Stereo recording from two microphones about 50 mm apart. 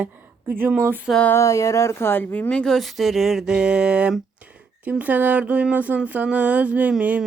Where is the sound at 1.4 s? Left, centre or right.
Left.